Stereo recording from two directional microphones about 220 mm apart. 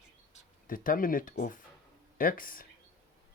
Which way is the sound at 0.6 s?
40° left (ahead or behind).